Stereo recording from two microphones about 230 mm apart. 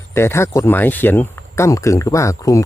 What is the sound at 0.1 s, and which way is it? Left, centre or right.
Speech, centre.